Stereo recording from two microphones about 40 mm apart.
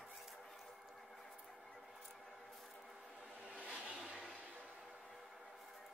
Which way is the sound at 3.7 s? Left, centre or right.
Right.